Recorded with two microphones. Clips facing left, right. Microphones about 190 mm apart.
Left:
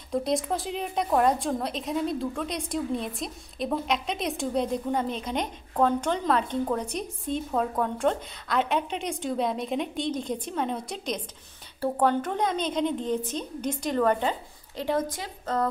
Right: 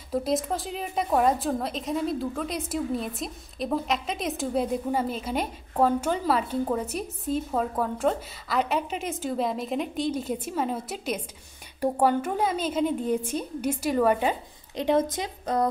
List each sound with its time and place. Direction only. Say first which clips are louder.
0.1 s a woman's voice: even; centre (ahead or behind)
14.8 s a woman's voice: right 4 dB; 20° right (ahead or behind)